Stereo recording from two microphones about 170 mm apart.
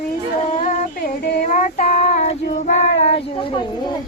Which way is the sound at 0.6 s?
50° left (ahead or behind).